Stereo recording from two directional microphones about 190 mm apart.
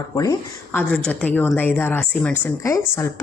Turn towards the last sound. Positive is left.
turn(degrees=15)  # may be behind; listen again after turning